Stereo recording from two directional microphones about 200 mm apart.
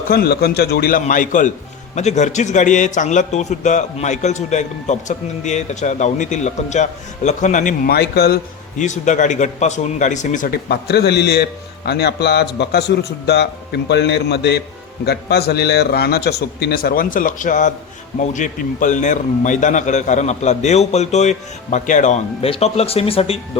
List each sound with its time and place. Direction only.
0.1 s a man's voice: 50° left (ahead or behind)
8.8 s a man's voice: 35° left (ahead or behind)